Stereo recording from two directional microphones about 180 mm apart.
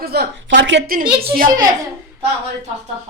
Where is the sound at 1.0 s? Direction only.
30° right (ahead or behind).